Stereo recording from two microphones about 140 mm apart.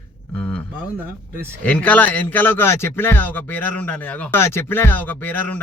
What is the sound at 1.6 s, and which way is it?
Speech, 10° left (ahead or behind).